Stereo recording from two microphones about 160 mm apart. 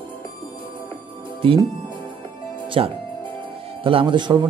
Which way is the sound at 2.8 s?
35° right (ahead or behind).